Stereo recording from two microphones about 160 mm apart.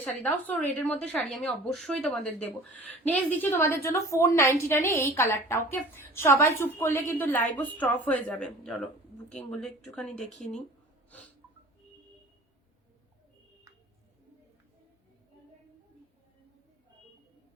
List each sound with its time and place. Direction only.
0.0 s a woman's voice: 10° left (ahead or behind)